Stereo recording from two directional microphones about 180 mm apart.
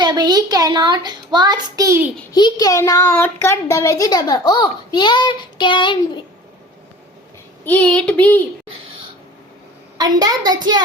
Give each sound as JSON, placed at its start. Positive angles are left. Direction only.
{"t": 0.0, "sound": "a child's voice", "side_deg": -25}
{"t": 2.3, "sound": "speech", "side_deg": 20}
{"t": 7.6, "sound": "speech", "side_deg": 10}
{"t": 10.0, "sound": "a child's voice", "side_deg": -20}